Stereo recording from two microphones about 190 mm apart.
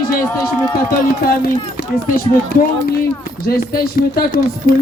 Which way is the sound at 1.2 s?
50° left (ahead or behind).